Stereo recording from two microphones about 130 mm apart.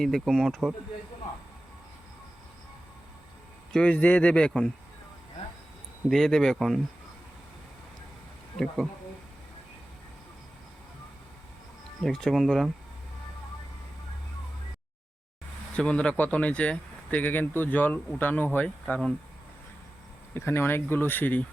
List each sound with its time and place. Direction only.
0.0 s speech: centre (ahead or behind)
3.7 s speech: 10° left (ahead or behind)
6.1 s speech: 5° left (ahead or behind)
8.5 s speech: 5° left (ahead or behind)
12.0 s speech: centre (ahead or behind)
15.7 s speech: 10° left (ahead or behind)
20.3 s speech: 20° left (ahead or behind)